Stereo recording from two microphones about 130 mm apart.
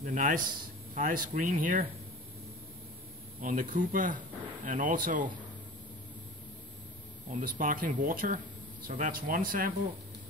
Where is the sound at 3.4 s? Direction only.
90° right.